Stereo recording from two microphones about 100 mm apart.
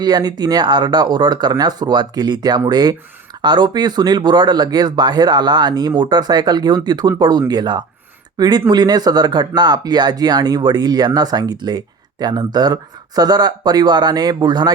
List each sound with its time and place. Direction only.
0.0 s speech: 45° right (ahead or behind)